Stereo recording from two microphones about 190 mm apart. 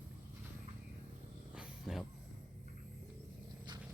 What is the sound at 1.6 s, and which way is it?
Roaring cats, centre (ahead or behind).